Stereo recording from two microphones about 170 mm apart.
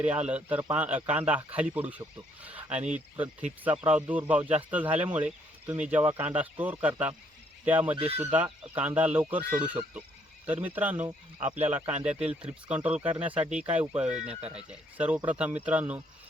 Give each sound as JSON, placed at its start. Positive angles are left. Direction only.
{"t": 0.0, "sound": "speech", "side_deg": -5}
{"t": 7.9, "sound": "speech", "side_deg": -35}
{"t": 8.7, "sound": "speech", "side_deg": -10}
{"t": 14.3, "sound": "speech", "side_deg": -35}
{"t": 14.7, "sound": "speech", "side_deg": -5}